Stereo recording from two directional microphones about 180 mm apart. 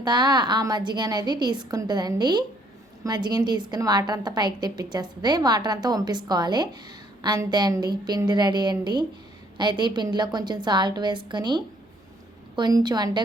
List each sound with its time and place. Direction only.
0.0 s a woman's voice: 25° right (ahead or behind)